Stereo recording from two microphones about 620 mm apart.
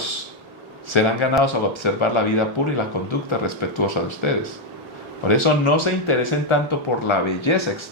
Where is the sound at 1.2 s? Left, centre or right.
Left.